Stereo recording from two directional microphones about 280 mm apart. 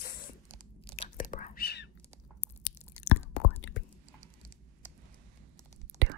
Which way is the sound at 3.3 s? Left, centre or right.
Left.